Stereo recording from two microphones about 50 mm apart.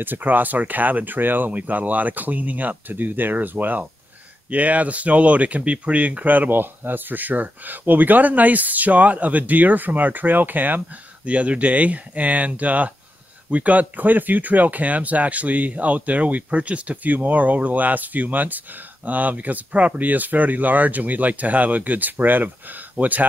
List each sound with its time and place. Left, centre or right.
0.0 s speech: right